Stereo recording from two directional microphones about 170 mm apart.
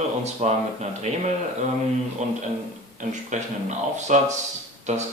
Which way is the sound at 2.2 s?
45° right (ahead or behind).